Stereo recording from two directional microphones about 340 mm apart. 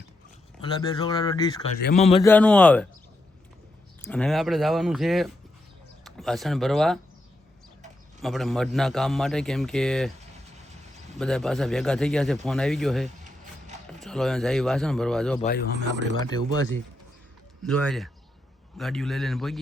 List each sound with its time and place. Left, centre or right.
0.6 s speech: centre
2.2 s a man's voice: centre
4.0 s a man's voice: centre
8.2 s a man's voice: centre
11.2 s a man's voice: centre
15.4 s speech: left
17.6 s a man's voice: centre